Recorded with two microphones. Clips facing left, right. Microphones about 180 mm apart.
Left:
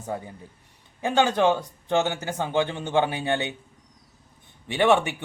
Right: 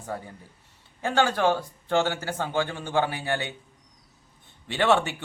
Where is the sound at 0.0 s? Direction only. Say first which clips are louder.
Left 3 dB; 20° left (ahead or behind).